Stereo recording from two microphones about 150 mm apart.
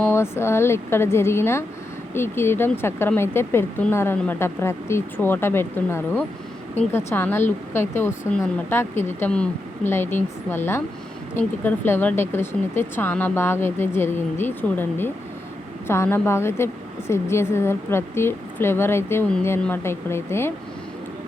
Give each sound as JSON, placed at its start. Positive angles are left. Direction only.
{"t": 0.0, "sound": "a woman's voice", "side_deg": 15}